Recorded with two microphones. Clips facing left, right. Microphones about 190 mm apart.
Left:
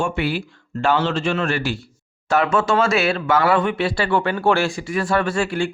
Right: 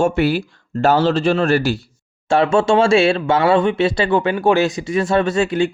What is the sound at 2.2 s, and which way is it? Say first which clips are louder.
Speech: right 4 dB; 30° right (ahead or behind).